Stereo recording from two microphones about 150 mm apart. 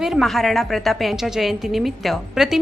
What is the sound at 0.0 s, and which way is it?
A woman's voice, centre (ahead or behind).